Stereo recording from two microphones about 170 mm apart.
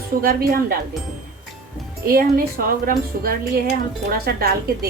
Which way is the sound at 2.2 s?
60° right (ahead or behind).